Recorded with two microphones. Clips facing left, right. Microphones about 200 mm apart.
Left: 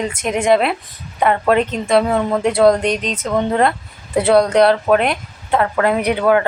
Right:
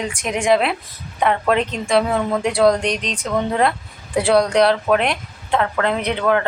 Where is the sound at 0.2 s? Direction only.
5° left (ahead or behind).